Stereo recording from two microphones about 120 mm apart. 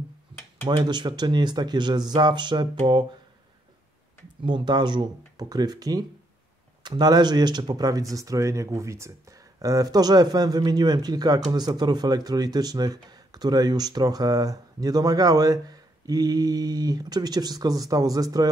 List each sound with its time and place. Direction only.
0.7 s speech: 40° right (ahead or behind)
4.4 s speech: 40° right (ahead or behind)